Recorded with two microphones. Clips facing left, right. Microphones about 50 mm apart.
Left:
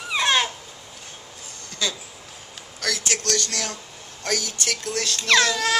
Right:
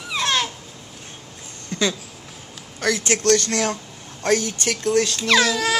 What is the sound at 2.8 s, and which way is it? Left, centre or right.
Speech, right.